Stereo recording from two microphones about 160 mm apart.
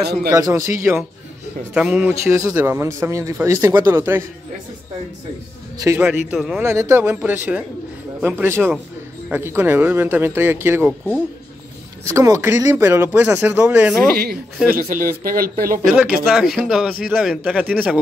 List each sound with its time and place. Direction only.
0.3 s a man's voice: 20° right (ahead or behind)
5.8 s a man's voice: 20° right (ahead or behind)
6.0 s a man's voice: 5° right (ahead or behind)
6.6 s a man's voice: 15° right (ahead or behind)
12.0 s a man's voice: 20° right (ahead or behind)
14.7 s speech: 65° right (ahead or behind)
15.9 s a man's voice: 5° right (ahead or behind)